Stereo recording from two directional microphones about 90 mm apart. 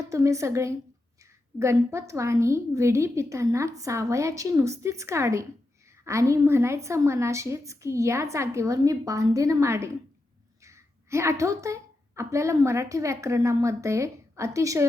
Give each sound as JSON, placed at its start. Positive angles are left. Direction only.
{"t": 0.0, "sound": "a woman's voice", "side_deg": -35}